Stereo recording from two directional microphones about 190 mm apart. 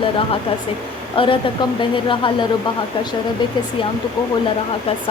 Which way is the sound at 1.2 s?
25° left (ahead or behind).